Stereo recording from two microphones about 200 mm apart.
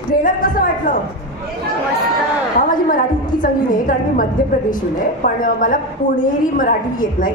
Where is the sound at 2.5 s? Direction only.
40° left (ahead or behind).